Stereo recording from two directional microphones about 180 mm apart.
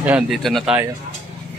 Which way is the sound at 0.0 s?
5° right (ahead or behind).